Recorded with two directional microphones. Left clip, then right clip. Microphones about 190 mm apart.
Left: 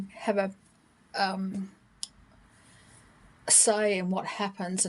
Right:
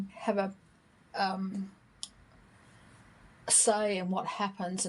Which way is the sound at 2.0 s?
35° left (ahead or behind).